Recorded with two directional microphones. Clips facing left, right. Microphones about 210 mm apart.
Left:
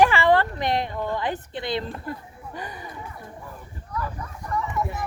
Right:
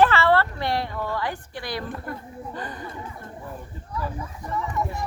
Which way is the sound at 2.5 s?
10° left (ahead or behind).